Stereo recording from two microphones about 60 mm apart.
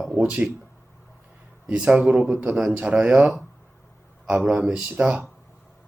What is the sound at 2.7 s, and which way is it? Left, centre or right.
Speech, centre.